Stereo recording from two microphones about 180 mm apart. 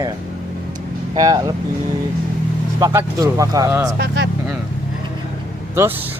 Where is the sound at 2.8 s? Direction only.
15° right (ahead or behind).